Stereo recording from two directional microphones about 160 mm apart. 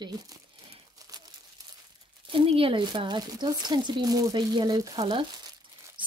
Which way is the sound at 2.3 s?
35° right (ahead or behind).